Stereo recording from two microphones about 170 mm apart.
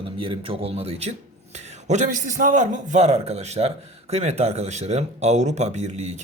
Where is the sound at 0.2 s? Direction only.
30° right (ahead or behind).